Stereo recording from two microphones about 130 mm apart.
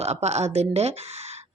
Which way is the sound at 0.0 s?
55° right (ahead or behind).